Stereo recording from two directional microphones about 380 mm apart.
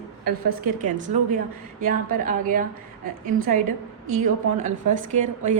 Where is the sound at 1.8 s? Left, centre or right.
Right.